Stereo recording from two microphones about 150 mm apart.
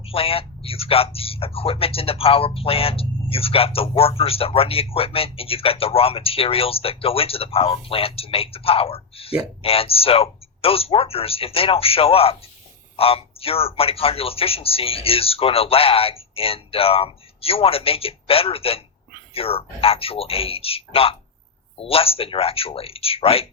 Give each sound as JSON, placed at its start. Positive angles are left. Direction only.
{"t": 0.0, "sound": "speech", "side_deg": 40}